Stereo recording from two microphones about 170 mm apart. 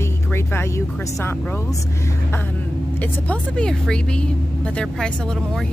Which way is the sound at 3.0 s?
5° left (ahead or behind).